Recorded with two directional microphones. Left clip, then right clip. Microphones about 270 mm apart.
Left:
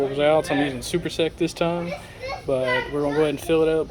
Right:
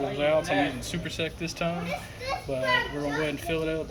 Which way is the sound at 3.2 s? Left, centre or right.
Centre.